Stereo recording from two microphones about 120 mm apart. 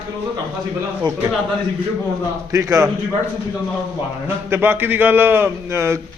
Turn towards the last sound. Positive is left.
turn(degrees=-20)  # may be behind; listen again after turning